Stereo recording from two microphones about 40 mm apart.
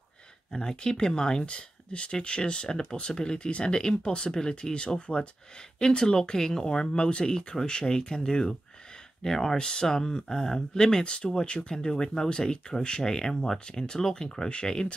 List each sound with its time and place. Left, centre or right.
0.6 s speech: centre
3.3 s speech: left
5.8 s speech: centre